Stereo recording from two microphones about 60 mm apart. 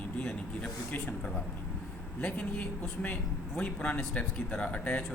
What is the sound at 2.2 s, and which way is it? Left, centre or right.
A man's voice, left.